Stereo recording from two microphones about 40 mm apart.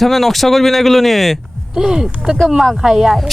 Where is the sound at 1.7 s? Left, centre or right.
Centre.